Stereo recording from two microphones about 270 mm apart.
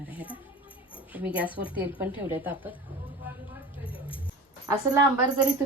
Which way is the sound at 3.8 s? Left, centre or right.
Centre.